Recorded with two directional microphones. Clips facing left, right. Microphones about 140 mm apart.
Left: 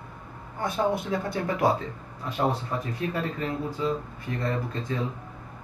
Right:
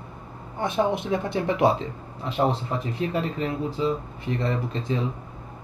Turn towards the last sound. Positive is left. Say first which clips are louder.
# right 3 dB
turn(degrees=-20)  # may be behind; listen again after turning